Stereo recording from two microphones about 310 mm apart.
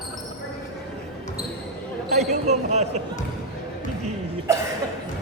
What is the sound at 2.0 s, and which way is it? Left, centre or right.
Speech, right.